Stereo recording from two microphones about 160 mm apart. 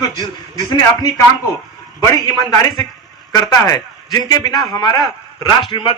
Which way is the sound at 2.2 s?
25° left (ahead or behind).